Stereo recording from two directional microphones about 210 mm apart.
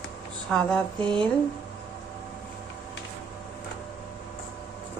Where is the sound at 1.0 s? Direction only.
25° right (ahead or behind).